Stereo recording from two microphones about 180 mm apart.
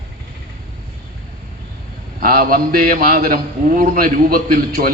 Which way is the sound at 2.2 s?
55° right (ahead or behind).